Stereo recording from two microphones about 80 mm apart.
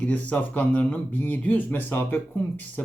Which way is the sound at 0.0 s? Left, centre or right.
Centre.